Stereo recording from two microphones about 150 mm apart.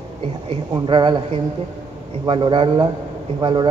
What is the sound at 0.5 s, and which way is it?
A man's voice, 30° right (ahead or behind).